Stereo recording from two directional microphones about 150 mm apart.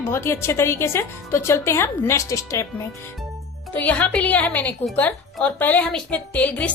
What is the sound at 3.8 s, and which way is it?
A woman's voice, 10° left (ahead or behind).